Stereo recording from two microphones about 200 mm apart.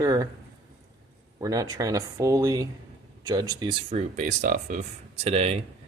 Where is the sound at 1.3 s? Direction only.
15° right (ahead or behind); by 4.8 s 40° right (ahead or behind).